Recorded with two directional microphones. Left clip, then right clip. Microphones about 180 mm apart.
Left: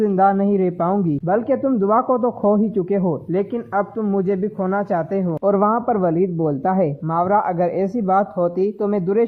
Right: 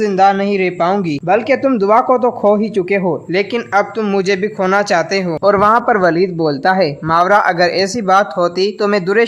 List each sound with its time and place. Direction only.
0.0 s speech: 25° right (ahead or behind)
1.6 s speech: 30° right (ahead or behind)
1.9 s speech: 20° right (ahead or behind)